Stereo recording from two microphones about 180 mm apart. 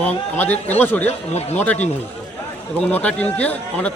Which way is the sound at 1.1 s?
35° left (ahead or behind).